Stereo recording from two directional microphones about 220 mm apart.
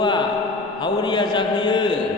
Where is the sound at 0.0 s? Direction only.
20° left (ahead or behind).